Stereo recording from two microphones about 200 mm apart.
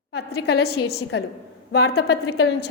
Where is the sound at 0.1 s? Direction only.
55° left (ahead or behind).